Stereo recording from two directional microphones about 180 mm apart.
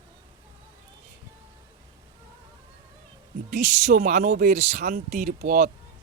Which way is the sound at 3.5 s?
45° right (ahead or behind).